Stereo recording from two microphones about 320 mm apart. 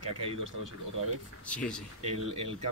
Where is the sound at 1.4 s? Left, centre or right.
Centre.